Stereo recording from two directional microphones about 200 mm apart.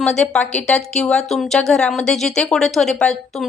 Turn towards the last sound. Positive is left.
turn(degrees=5)  # may be behind; listen again after turning